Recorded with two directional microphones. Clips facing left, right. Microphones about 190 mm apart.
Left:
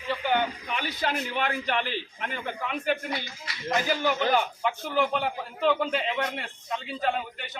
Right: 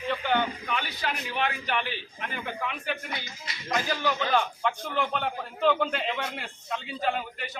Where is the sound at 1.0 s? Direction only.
45° left (ahead or behind).